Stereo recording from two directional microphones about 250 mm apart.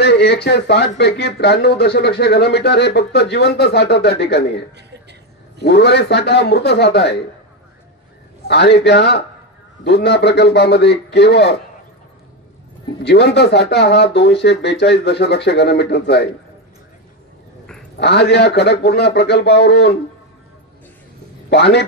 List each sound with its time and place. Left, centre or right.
0.0 s speech: left
8.5 s speech: left
13.0 s speech: left
17.9 s speech: left
21.5 s speech: left